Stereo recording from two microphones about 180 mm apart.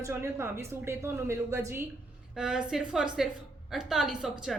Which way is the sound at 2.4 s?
5° right (ahead or behind).